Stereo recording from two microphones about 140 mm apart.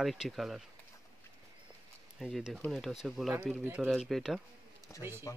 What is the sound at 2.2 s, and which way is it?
Speech, 5° right (ahead or behind).